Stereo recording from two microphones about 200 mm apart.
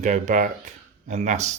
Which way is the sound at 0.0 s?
40° right (ahead or behind).